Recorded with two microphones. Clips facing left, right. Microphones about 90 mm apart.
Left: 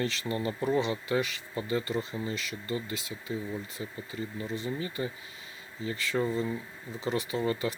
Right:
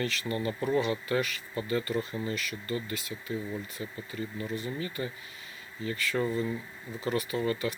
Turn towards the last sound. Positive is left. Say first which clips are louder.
# even
turn(degrees=25)  # may be behind; listen again after turning